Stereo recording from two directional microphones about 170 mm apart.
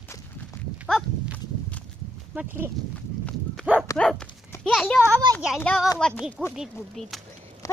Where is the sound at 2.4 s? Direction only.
10° right (ahead or behind).